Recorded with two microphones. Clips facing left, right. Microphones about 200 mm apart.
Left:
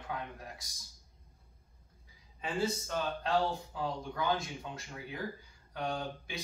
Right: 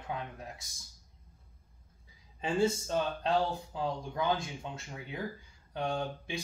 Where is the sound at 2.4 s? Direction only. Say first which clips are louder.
Right 5 dB; 25° right (ahead or behind).